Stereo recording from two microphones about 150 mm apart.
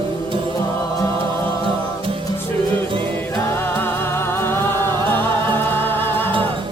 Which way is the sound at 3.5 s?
15° left (ahead or behind).